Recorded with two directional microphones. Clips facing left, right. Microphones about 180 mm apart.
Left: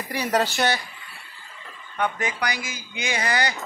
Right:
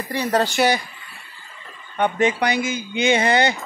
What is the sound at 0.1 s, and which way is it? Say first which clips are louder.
Speech: right 3 dB; 10° left (ahead or behind).